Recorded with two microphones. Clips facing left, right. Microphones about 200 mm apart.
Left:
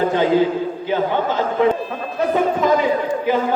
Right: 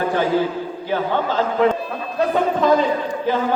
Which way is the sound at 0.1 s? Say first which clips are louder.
Left 3 dB; 20° left (ahead or behind).